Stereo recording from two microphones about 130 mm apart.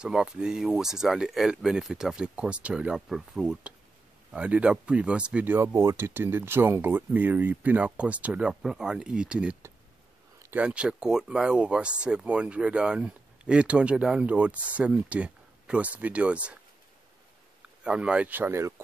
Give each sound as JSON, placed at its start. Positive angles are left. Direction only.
{"t": 0.0, "sound": "speech", "side_deg": -5}
{"t": 17.6, "sound": "speech", "side_deg": -5}